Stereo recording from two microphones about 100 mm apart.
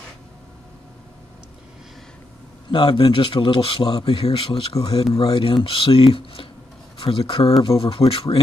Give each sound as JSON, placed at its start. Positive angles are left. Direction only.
{"t": 2.7, "sound": "speech", "side_deg": 55}